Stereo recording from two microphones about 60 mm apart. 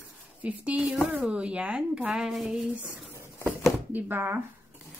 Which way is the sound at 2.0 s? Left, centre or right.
Centre.